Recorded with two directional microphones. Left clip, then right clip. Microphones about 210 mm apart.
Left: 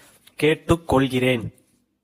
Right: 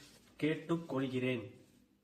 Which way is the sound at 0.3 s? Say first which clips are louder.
Left 16 dB; 45° left (ahead or behind).